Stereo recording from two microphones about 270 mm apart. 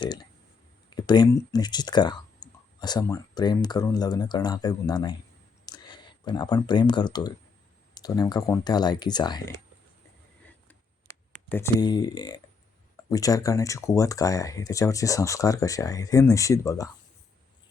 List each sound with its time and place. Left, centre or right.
0.0 s speech: centre
10.7 s computer keyboard: centre
13.1 s speech: centre